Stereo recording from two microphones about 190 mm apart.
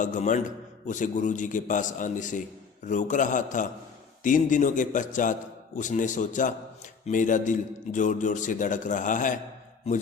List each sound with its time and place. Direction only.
0.0 s a man's voice: 40° left (ahead or behind)